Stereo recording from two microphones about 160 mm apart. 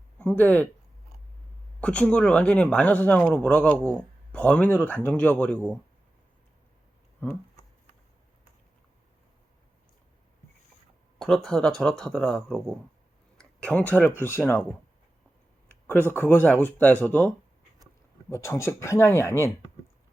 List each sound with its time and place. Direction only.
0.2 s a man's voice: 10° left (ahead or behind)
1.8 s a man's voice: 5° left (ahead or behind)
7.2 s a sound: 15° left (ahead or behind)
11.2 s speech: centre (ahead or behind)
13.3 s a sound: 5° left (ahead or behind)
14.2 s a man's voice: 15° left (ahead or behind)
16.1 s a man's voice: 15° left (ahead or behind)